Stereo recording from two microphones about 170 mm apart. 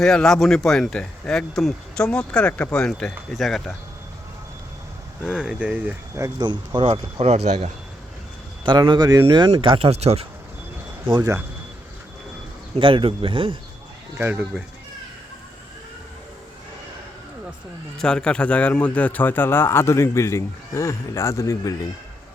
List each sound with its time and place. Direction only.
0.0 s speech: 5° left (ahead or behind)
5.2 s speech: 5° right (ahead or behind); by 7.7 s 40° right (ahead or behind)
8.6 s speech: 25° right (ahead or behind)
11.0 s speech: 20° right (ahead or behind)
12.7 s speech: 30° right (ahead or behind)
14.2 s speech: 10° right (ahead or behind)
17.9 s a man's voice: 5° left (ahead or behind)